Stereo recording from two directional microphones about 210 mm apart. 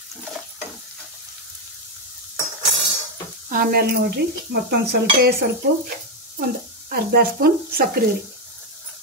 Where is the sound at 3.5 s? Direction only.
40° right (ahead or behind).